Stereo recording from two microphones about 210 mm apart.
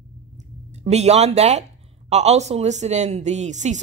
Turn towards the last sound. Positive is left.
turn(degrees=-35)  # may be behind; listen again after turning